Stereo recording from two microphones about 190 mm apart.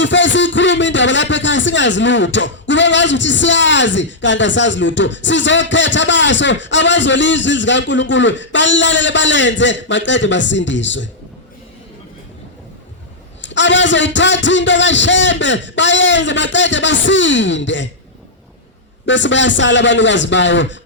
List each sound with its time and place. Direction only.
0.0 s a man's voice: 75° left (ahead or behind)
13.4 s a man's voice: 70° left (ahead or behind)
19.0 s a man's voice: 75° left (ahead or behind)